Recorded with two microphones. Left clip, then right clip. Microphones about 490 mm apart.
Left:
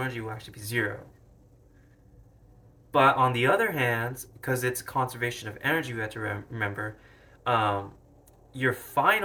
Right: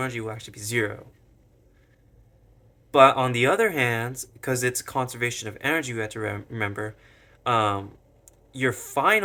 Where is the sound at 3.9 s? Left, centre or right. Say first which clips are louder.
Right 1 dB; right.